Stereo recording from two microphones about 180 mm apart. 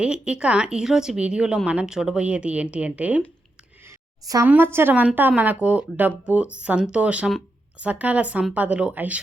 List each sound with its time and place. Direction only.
0.0 s speech: 5° right (ahead or behind)
3.8 s a sound: 20° right (ahead or behind)
4.4 s a woman's voice: 10° right (ahead or behind)